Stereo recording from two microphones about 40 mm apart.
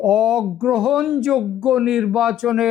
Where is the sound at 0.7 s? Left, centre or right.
Centre.